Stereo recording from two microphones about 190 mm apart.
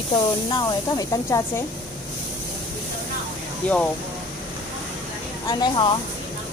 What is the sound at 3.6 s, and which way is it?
Speech, 5° left (ahead or behind).